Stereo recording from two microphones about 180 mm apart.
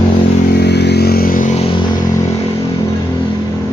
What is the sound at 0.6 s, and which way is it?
Vehicle, 70° left (ahead or behind).